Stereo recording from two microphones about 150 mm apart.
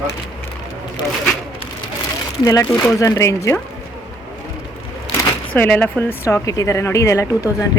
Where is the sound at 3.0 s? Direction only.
20° left (ahead or behind).